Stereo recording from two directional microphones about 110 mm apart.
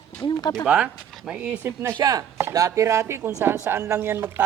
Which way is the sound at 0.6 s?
10° right (ahead or behind).